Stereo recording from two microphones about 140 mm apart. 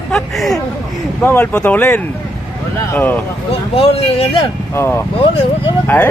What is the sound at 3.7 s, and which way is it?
Speech, 45° left (ahead or behind).